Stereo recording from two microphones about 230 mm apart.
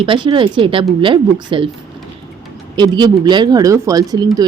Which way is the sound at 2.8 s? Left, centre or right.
Centre.